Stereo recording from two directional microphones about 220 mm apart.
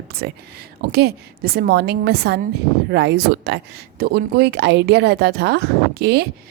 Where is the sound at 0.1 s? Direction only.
45° right (ahead or behind).